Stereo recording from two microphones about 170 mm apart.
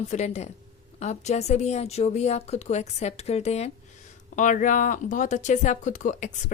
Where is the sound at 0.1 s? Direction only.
40° left (ahead or behind).